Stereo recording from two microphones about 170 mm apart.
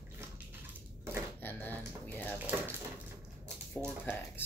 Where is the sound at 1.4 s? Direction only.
10° left (ahead or behind).